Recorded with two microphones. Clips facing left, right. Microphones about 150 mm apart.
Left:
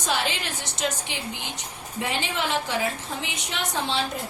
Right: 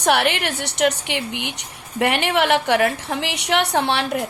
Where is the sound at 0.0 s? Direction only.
70° right (ahead or behind).